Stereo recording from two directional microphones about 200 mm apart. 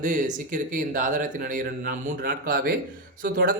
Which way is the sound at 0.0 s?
40° right (ahead or behind).